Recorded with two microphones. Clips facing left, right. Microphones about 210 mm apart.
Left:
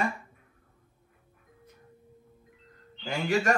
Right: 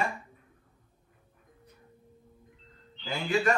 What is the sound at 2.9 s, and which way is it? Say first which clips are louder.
Speech: left 2 dB; 45° left (ahead or behind).